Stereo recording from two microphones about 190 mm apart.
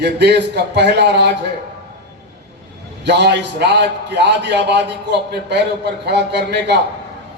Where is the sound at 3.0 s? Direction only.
60° right (ahead or behind).